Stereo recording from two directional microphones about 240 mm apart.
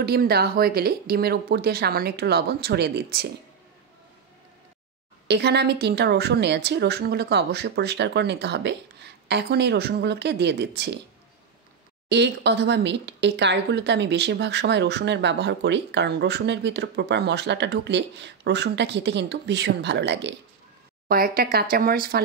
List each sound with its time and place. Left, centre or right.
0.0 s speech: right
5.3 s speech: right
12.1 s speech: right